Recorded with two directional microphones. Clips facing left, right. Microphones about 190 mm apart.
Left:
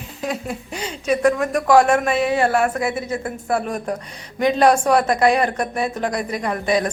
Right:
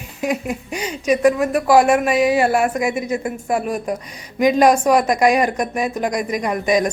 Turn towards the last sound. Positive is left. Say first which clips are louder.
# right 2 dB
turn(degrees=-15)  # may be behind; listen again after turning